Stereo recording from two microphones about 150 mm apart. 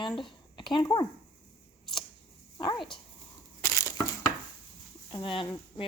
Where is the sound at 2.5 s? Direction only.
30° left (ahead or behind).